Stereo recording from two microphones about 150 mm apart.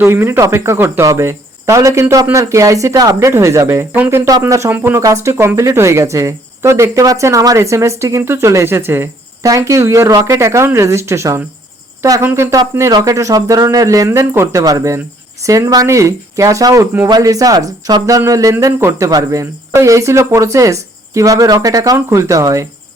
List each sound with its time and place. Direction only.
0.0 s speech: 15° right (ahead or behind)